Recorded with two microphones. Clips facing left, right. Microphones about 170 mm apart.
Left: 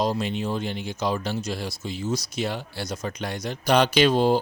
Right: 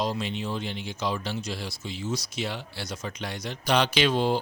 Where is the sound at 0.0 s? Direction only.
45° left (ahead or behind).